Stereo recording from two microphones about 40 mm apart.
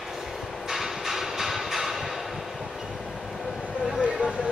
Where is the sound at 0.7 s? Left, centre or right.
Centre.